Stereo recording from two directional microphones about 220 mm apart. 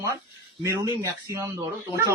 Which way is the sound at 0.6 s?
15° right (ahead or behind).